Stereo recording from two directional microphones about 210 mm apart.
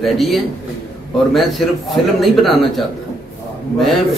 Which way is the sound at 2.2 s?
Centre (ahead or behind).